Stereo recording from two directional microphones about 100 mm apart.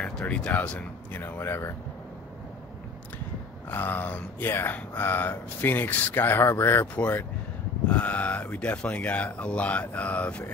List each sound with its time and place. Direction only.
0.0 s speech: 10° left (ahead or behind)
3.7 s speech: 20° left (ahead or behind)